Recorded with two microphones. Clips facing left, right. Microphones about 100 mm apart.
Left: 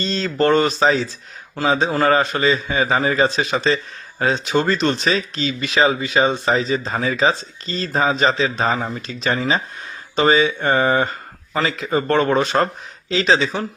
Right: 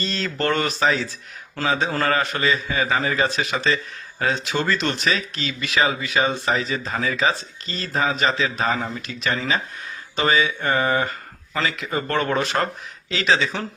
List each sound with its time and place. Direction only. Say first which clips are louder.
0.0 s speech: left 6 dB; 25° left (ahead or behind)